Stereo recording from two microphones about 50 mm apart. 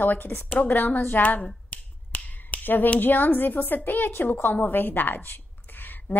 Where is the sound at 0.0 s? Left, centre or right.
Left.